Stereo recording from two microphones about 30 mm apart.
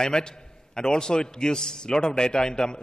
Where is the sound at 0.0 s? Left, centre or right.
Left.